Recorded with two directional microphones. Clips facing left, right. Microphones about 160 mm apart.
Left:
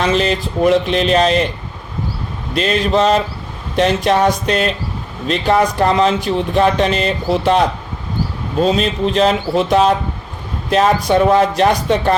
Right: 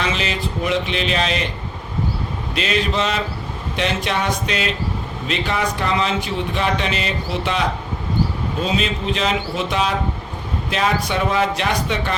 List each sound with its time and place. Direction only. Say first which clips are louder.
0.0 s speech: left 7 dB; 40° left (ahead or behind)
2.6 s speech: left 6 dB; 40° left (ahead or behind)
8.6 s speech: left 7 dB; 40° left (ahead or behind)